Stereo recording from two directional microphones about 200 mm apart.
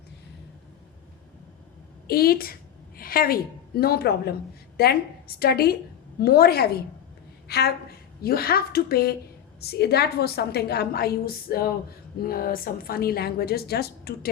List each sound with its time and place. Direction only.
2.0 s a woman's voice: 50° left (ahead or behind)